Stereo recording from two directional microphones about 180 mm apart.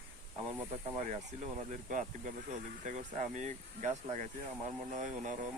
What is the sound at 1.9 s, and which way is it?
Speech, 45° right (ahead or behind).